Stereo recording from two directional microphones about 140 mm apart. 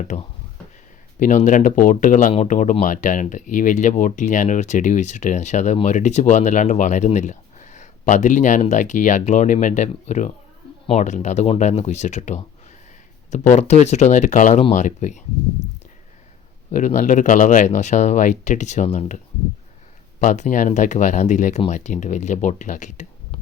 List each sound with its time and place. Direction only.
0.1 s speech: 55° left (ahead or behind)
2.3 s speech: 60° left (ahead or behind)
13.5 s speech: 55° left (ahead or behind)
16.7 s speech: 60° left (ahead or behind)